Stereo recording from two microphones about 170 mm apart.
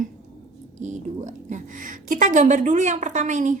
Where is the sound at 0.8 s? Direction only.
45° right (ahead or behind).